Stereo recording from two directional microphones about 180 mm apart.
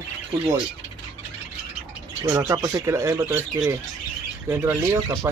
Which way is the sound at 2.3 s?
20° right (ahead or behind).